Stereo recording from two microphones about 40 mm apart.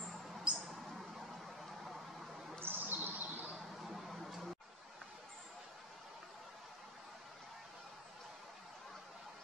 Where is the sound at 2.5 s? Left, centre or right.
Right.